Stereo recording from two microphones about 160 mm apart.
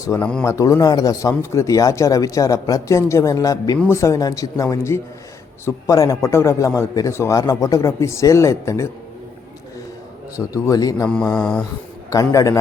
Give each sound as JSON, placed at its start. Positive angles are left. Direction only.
{"t": 0.0, "sound": "a man's voice", "side_deg": 20}
{"t": 10.3, "sound": "speech", "side_deg": 20}
{"t": 11.1, "sound": "mantra", "side_deg": 5}
{"t": 12.1, "sound": "speech", "side_deg": 20}